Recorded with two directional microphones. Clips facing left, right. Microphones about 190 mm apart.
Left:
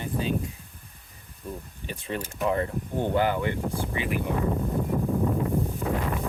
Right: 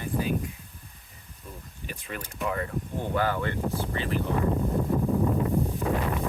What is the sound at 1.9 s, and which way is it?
Speech, 25° left (ahead or behind).